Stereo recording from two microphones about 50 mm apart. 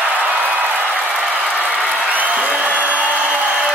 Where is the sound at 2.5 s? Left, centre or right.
Right.